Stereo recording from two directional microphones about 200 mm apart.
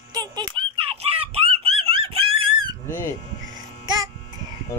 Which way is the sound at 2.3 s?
90° right.